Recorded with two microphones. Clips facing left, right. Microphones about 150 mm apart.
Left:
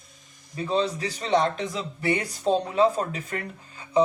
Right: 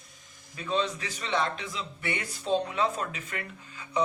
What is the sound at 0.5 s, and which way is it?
Speech, 35° left (ahead or behind).